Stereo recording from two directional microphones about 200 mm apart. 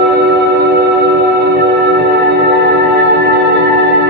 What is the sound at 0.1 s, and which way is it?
Music, 60° right (ahead or behind).